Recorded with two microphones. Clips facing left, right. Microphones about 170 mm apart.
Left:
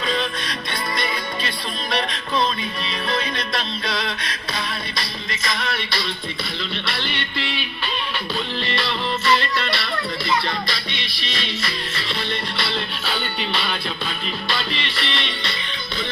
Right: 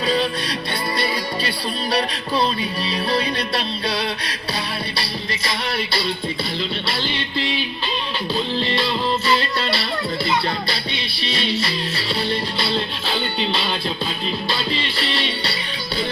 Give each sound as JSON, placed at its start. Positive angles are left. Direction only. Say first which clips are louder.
{"t": 0.1, "sound": "music", "louder": "right 4 dB", "side_deg": -35}
{"t": 8.5, "sound": "music", "louder": "right 4 dB", "side_deg": -30}